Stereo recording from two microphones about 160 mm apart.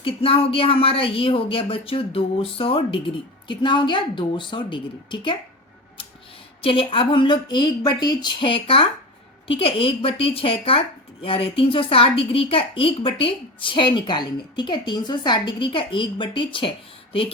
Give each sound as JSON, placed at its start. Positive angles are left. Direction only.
{"t": 0.0, "sound": "speech", "side_deg": 35}
{"t": 6.6, "sound": "speech", "side_deg": 35}